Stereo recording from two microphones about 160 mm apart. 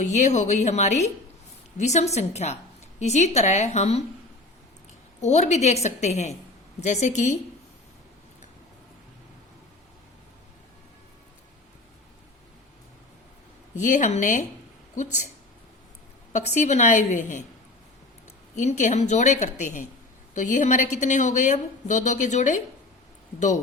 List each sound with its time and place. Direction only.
0.0 s a woman's voice: 50° left (ahead or behind)
5.2 s a woman's voice: 45° left (ahead or behind)
13.7 s a woman's voice: 50° left (ahead or behind)
16.6 s a woman's voice: 50° left (ahead or behind)
18.5 s a woman's voice: 45° left (ahead or behind)